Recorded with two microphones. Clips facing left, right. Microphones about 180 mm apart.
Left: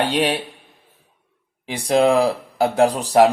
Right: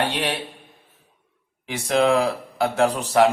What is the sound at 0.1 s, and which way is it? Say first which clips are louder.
Speech: left 6 dB; 35° left (ahead or behind).